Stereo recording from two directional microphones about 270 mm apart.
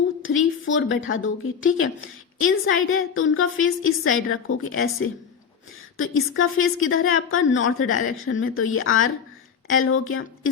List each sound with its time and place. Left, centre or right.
0.2 s speech: left